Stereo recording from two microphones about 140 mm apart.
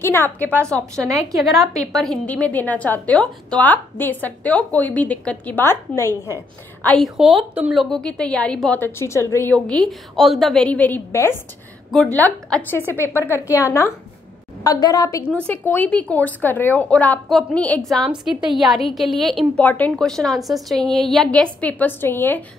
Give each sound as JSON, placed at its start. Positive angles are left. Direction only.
{"t": 0.0, "sound": "a woman's voice", "side_deg": 15}
{"t": 1.0, "sound": "a woman's voice", "side_deg": -20}
{"t": 1.9, "sound": "a woman's voice", "side_deg": 0}
{"t": 6.9, "sound": "a woman's voice", "side_deg": 0}
{"t": 9.5, "sound": "a woman's voice", "side_deg": 5}
{"t": 15.4, "sound": "a woman's voice", "side_deg": 15}
{"t": 19.6, "sound": "a woman's voice", "side_deg": 10}